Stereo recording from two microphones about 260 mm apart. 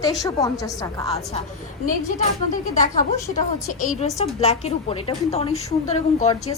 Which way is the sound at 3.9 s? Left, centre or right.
Left.